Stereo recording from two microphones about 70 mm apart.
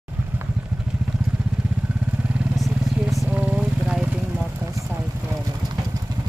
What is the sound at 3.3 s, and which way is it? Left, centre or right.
Vehicle, right.